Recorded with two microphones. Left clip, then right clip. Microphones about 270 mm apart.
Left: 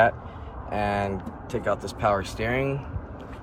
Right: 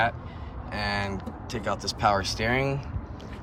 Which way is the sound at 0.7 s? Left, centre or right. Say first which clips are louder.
Left 4 dB; centre.